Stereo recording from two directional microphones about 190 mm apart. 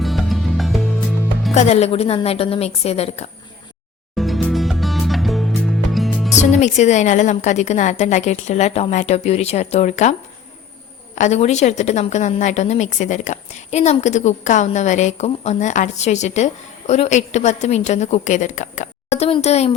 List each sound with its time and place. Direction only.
0.0 s music: centre (ahead or behind)
1.5 s a woman's voice: 35° left (ahead or behind)
4.2 s music: centre (ahead or behind)
6.4 s a woman's voice: 35° left (ahead or behind)